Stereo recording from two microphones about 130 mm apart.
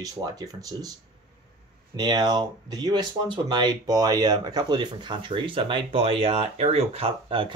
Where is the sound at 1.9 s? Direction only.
30° right (ahead or behind).